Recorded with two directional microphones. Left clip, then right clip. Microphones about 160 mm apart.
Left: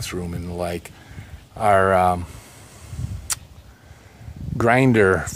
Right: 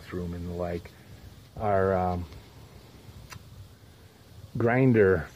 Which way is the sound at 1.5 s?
25° left (ahead or behind).